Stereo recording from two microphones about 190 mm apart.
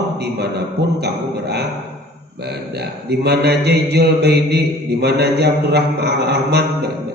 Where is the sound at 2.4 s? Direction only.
60° right (ahead or behind).